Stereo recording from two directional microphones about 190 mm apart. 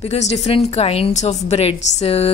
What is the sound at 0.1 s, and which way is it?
A woman's voice, 35° left (ahead or behind).